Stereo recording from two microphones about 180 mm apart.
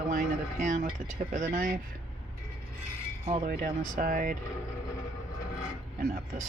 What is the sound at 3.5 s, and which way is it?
Speech, 55° right (ahead or behind).